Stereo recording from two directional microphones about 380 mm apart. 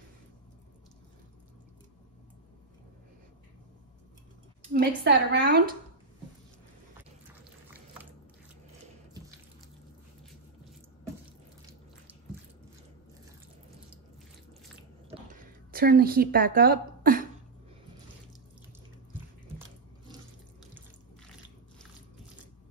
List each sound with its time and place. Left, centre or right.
4.7 s a woman's voice: right
15.7 s a woman's voice: right